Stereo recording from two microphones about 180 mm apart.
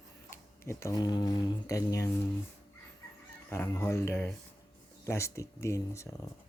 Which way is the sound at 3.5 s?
15° left (ahead or behind).